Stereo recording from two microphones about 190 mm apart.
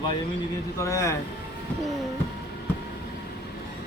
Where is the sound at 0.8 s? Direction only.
15° left (ahead or behind).